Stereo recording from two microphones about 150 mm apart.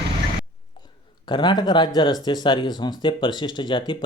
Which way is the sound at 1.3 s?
30° left (ahead or behind).